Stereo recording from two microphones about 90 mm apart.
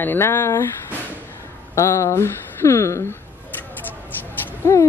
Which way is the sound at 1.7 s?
30° left (ahead or behind).